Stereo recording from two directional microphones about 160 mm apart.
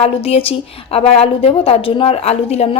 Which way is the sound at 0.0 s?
35° left (ahead or behind).